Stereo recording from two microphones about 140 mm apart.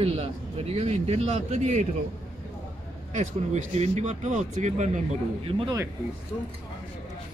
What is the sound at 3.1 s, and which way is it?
Speech, 55° right (ahead or behind).